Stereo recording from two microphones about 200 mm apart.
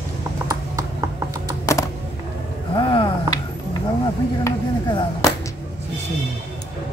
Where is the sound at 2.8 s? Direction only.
25° left (ahead or behind).